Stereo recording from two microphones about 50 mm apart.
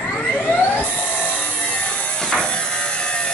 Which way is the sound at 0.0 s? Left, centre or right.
Left.